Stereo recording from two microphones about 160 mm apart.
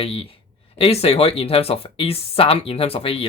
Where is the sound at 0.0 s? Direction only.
35° left (ahead or behind).